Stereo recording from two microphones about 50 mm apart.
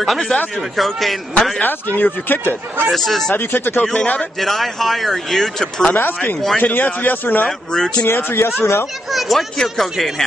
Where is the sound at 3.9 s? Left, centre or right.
Left.